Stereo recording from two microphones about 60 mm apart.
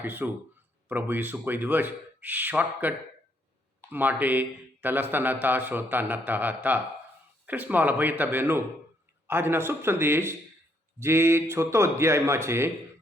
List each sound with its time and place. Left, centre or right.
0.0 s speech: right